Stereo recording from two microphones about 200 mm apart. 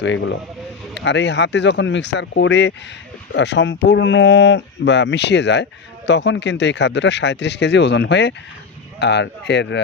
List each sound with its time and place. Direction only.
0.0 s speech: 65° left (ahead or behind)